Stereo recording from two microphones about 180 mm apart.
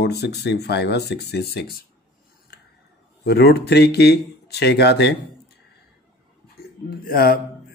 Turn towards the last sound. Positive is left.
turn(degrees=55)  # may be behind; listen again after turning